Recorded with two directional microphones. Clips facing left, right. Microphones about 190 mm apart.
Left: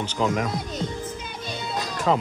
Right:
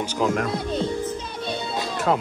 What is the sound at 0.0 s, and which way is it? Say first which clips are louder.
Speech: right 1 dB; 10° right (ahead or behind).